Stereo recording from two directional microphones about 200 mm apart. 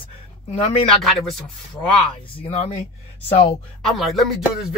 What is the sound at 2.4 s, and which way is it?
Speech, 30° left (ahead or behind).